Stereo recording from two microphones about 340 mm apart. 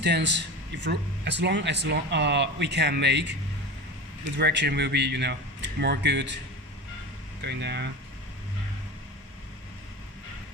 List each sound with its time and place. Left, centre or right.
0.0 s speech: right
7.4 s speech: right